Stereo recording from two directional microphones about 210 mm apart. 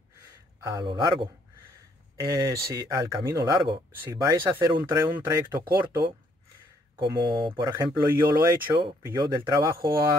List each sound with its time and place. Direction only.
0.7 s speech: 20° right (ahead or behind)
7.0 s speech: 25° right (ahead or behind)